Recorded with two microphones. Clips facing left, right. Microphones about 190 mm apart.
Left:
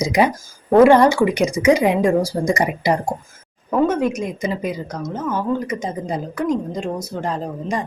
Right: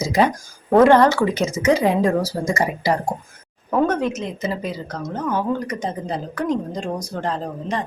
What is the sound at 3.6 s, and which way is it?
A woman's voice, 5° left (ahead or behind).